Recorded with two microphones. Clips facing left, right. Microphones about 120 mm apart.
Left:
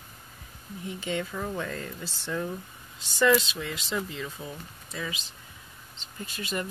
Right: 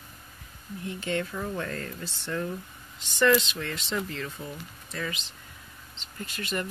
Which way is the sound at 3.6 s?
5° left (ahead or behind).